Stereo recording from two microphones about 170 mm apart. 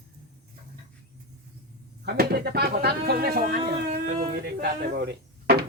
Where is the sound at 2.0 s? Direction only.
65° right (ahead or behind).